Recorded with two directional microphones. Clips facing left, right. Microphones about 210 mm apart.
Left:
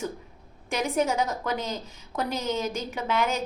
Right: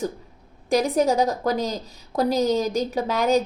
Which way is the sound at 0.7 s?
35° right (ahead or behind).